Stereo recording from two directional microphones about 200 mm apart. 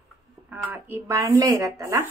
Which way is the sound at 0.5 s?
10° right (ahead or behind).